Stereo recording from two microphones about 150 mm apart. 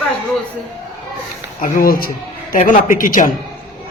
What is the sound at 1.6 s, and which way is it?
Speech, 75° left (ahead or behind).